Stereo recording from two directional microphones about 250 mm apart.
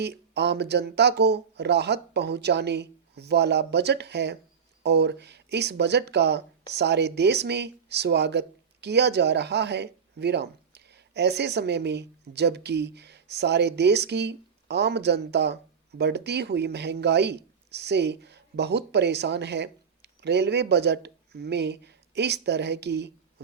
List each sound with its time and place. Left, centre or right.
0.0 s a man's voice: right